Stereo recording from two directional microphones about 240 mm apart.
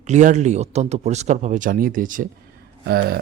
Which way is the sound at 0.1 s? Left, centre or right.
Right.